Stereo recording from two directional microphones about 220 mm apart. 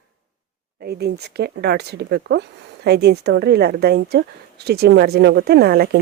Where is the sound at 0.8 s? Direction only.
45° right (ahead or behind).